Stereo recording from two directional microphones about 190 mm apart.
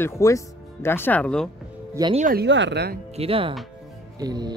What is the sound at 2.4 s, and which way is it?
Speech, 70° right (ahead or behind).